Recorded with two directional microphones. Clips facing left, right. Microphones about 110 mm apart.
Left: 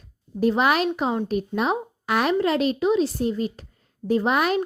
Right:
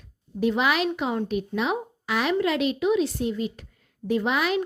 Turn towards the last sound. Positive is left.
turn(degrees=45)  # may be behind; listen again after turning